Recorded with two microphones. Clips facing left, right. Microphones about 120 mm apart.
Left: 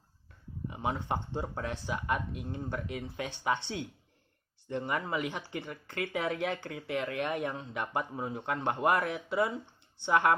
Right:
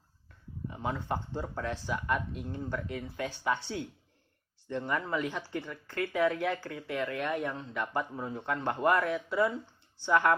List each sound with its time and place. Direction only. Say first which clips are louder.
0.7 s speech: left 1 dB; 20° left (ahead or behind)